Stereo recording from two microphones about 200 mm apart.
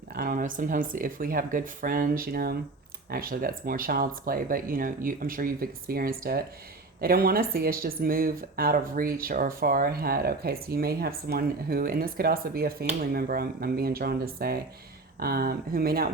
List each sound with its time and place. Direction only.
0.1 s speech: 45° right (ahead or behind)